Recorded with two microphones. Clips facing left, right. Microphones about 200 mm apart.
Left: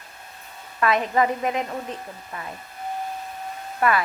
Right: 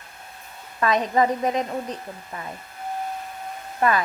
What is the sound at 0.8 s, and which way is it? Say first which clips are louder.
Speech: right 1 dB; 20° right (ahead or behind).